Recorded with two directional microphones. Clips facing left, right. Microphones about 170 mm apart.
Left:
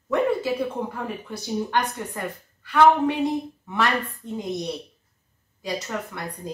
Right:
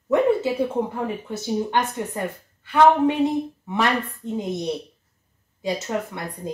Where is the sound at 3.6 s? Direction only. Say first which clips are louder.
Right 1 dB; 20° right (ahead or behind).